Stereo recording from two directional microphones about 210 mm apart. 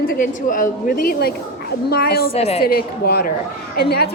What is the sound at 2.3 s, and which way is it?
Speech, 30° left (ahead or behind).